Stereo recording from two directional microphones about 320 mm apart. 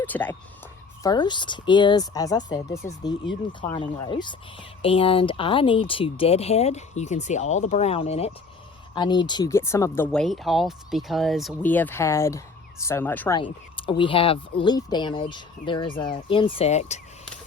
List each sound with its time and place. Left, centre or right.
0.0 s speech: centre